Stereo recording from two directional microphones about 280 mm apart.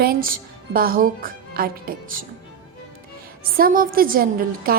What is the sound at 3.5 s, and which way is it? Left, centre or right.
A woman's voice, right.